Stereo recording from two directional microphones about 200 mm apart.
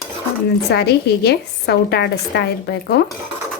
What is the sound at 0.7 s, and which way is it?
A woman's voice, 55° left (ahead or behind).